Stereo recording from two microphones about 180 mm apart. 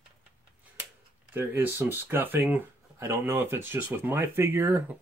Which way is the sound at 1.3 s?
10° right (ahead or behind).